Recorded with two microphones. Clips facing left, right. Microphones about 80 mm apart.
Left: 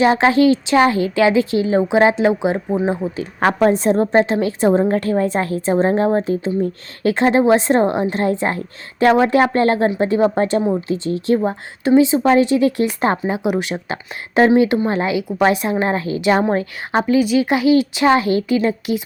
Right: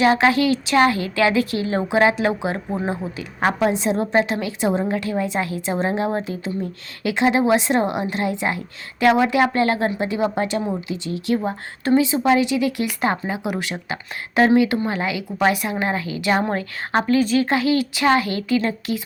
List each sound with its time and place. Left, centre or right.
0.0 s speech: left
3.6 s a woman's voice: left
4.0 s a woman's voice: left
11.3 s a woman's voice: left
16.3 s speech: centre